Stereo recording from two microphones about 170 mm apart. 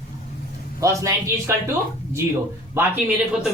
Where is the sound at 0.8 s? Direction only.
20° right (ahead or behind).